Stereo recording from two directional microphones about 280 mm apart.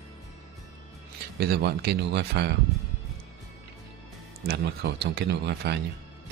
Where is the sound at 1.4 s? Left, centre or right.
Right.